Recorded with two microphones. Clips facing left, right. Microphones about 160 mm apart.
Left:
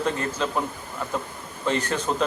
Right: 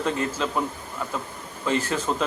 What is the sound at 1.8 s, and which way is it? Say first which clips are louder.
Speech: even; 5° right (ahead or behind).